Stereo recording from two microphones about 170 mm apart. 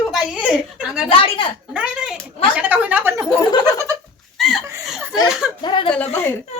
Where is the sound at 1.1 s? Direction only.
30° left (ahead or behind).